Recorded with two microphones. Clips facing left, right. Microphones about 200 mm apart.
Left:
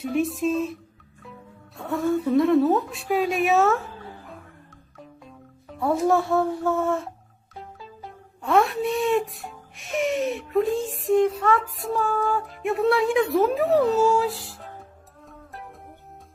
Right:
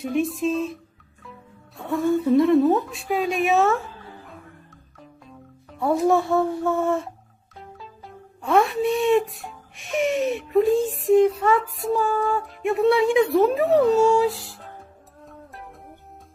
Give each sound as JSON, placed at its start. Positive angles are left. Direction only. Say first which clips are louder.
{"t": 0.1, "sound": "speech", "louder": "even", "side_deg": 0}
{"t": 1.7, "sound": "a woman's voice", "louder": "right 2 dB", "side_deg": 0}
{"t": 5.7, "sound": "speech", "louder": "right 2 dB", "side_deg": 0}
{"t": 15.3, "sound": "music", "louder": "even", "side_deg": 0}